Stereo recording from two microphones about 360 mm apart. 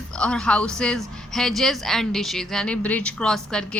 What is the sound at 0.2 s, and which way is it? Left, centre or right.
A woman's voice, centre.